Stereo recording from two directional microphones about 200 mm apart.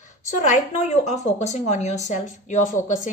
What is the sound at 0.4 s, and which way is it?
A woman's voice, 35° left (ahead or behind).